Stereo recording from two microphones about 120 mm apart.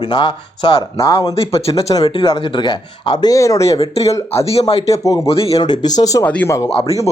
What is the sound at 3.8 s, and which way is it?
Speech, 60° left (ahead or behind).